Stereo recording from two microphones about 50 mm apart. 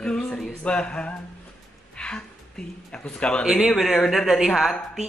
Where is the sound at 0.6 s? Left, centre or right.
Left.